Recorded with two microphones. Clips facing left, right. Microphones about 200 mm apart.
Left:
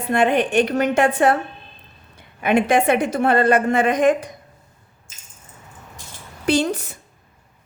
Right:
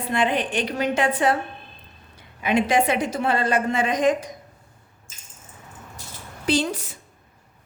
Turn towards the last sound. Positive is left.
turn(degrees=60)  # may be behind; listen again after turning